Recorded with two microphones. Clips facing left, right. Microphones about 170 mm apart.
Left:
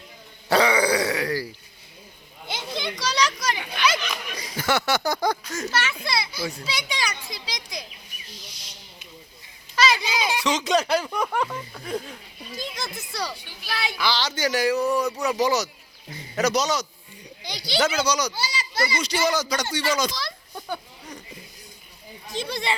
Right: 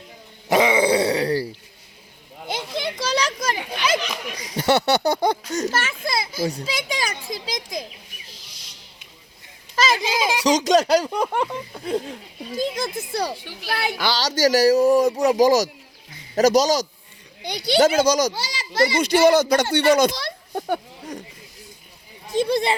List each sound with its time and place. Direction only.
0.4 s groan: 20° right (ahead or behind)
2.5 s children playing: 50° right (ahead or behind)
3.8 s chatter: 35° right (ahead or behind)
4.5 s a child's voice: 30° right (ahead or behind); by 7.1 s 45° right (ahead or behind)
7.3 s children playing: 45° right (ahead or behind)
9.7 s a child's voice: 45° right (ahead or behind); by 12.2 s 30° right (ahead or behind)
12.5 s a child's voice: 50° right (ahead or behind)
13.4 s a child's voice: 90° right
13.7 s a child's voice: 50° right (ahead or behind)
17.4 s a child's voice: 60° right (ahead or behind)
22.3 s speech: 50° right (ahead or behind)